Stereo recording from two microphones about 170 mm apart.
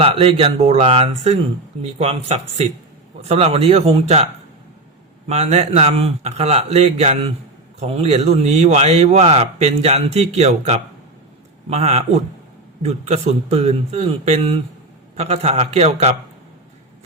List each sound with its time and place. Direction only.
0.0 s a man's voice: 35° right (ahead or behind)
5.3 s a man's voice: 40° right (ahead or behind)